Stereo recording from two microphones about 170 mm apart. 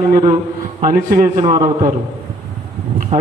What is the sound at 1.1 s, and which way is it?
Speech, 50° right (ahead or behind).